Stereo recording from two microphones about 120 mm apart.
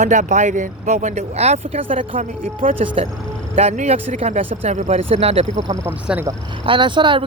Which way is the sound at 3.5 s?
75° right (ahead or behind).